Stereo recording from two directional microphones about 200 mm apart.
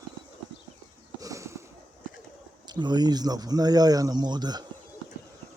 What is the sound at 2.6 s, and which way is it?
Speech, 20° right (ahead or behind).